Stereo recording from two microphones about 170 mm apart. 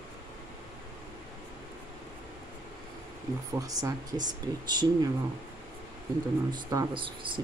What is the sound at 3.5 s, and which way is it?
Speech, 20° right (ahead or behind).